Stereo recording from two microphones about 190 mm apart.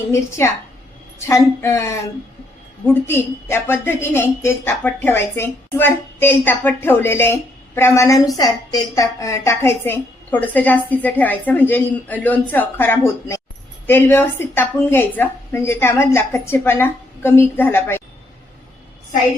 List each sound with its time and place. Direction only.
0.1 s a woman's voice: 15° left (ahead or behind)